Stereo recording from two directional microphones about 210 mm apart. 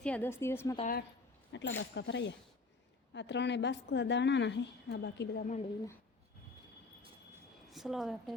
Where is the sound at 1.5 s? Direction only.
60° left (ahead or behind).